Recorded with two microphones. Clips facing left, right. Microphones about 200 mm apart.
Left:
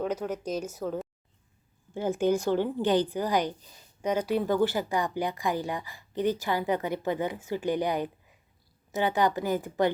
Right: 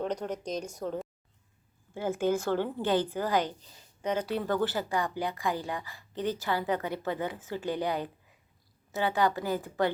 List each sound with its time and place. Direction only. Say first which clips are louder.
0.0 s speech: left 2 dB; 5° left (ahead or behind)
1.9 s a woman's voice: left 3 dB; 20° left (ahead or behind)